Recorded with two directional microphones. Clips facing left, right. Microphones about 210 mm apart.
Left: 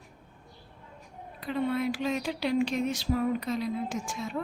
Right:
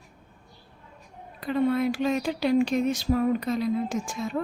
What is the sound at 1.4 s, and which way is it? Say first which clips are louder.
Speech: right 5 dB; 45° right (ahead or behind).